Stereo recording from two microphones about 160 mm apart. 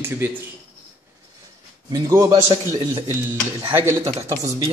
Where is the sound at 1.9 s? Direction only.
20° right (ahead or behind).